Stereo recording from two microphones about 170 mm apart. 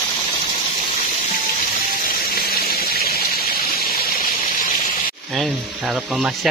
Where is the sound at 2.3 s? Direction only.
60° left (ahead or behind).